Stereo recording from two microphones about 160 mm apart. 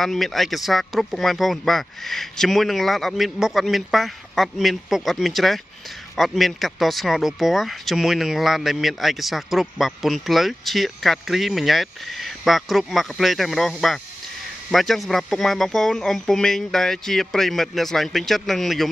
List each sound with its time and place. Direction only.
0.0 s speech: centre (ahead or behind)